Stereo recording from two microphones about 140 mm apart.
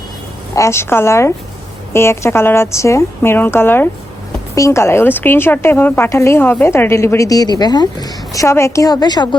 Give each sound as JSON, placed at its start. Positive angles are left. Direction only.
{"t": 0.5, "sound": "a woman's voice", "side_deg": 20}